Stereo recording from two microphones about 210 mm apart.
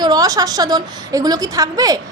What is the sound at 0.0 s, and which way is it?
A woman's voice, 20° right (ahead or behind).